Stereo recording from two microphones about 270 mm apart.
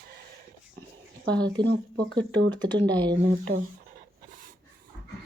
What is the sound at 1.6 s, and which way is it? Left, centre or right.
Speech, right.